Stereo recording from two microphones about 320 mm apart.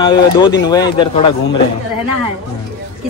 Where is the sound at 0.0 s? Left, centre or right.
Centre.